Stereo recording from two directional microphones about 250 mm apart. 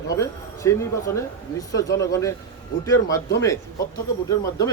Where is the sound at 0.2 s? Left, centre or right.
Centre.